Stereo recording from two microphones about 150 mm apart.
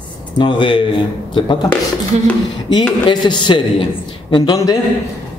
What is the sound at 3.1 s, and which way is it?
A man's voice, 30° left (ahead or behind).